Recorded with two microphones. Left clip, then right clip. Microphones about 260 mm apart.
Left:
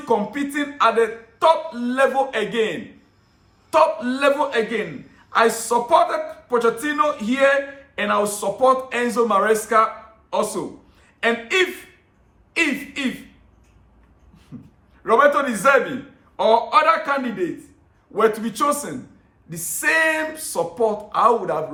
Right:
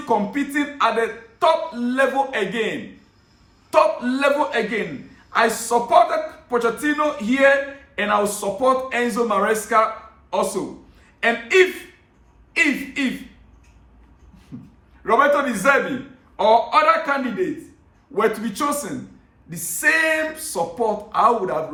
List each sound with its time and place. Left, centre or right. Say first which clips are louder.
0.0 s a man's voice: even; centre
15.0 s a man's voice: left 1 dB; centre